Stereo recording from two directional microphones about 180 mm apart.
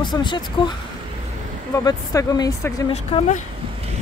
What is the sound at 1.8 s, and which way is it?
Speech, 20° left (ahead or behind).